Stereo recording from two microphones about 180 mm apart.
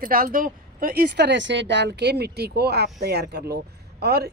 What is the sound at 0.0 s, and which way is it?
Speech, 50° right (ahead or behind).